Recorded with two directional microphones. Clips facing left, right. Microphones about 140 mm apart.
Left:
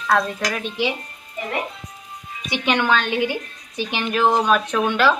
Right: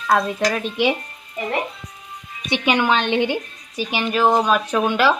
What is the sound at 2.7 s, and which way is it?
Speech, 10° right (ahead or behind).